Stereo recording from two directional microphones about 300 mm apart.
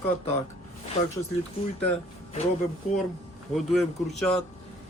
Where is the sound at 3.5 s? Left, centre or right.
Centre.